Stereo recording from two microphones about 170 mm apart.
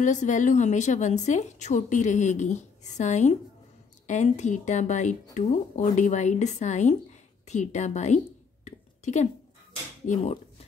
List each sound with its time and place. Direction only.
0.0 s a woman's voice: 45° left (ahead or behind)
8.6 s a sound: 45° left (ahead or behind)
10.0 s speech: 40° left (ahead or behind)